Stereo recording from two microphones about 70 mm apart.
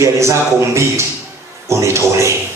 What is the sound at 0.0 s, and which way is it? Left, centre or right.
A man's voice, right.